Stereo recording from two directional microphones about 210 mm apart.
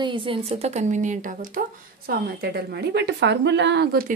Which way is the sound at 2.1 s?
50° right (ahead or behind).